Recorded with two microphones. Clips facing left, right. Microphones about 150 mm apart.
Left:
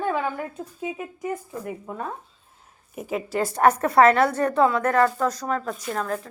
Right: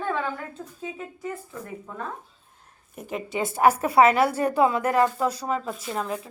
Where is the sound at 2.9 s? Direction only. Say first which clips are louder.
Left 3 dB; 5° left (ahead or behind).